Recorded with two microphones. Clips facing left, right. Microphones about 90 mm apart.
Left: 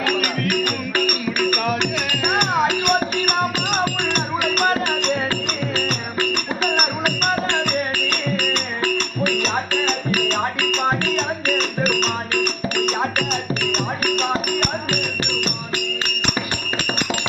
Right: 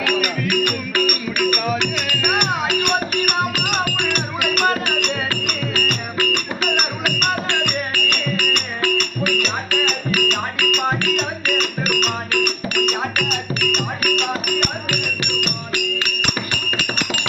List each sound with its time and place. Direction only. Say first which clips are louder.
0.0 s music: right 1 dB; 35° left (ahead or behind)